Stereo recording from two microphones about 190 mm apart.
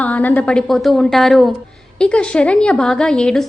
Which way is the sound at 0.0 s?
10° left (ahead or behind).